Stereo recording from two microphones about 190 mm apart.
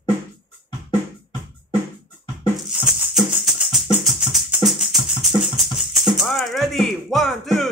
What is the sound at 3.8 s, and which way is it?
Music, centre (ahead or behind).